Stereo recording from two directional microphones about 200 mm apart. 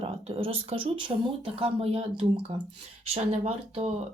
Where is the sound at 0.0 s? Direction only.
25° right (ahead or behind).